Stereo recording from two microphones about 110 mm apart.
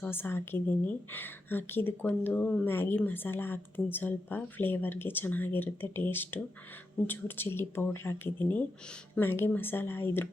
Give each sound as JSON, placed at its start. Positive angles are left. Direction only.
{"t": 0.0, "sound": "speech", "side_deg": 20}